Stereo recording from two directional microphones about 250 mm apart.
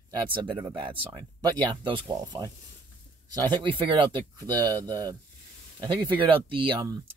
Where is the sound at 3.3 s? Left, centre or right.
Centre.